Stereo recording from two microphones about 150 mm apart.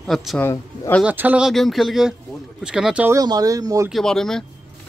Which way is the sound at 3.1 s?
25° right (ahead or behind).